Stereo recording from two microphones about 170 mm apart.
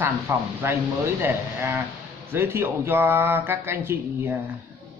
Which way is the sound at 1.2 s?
15° right (ahead or behind).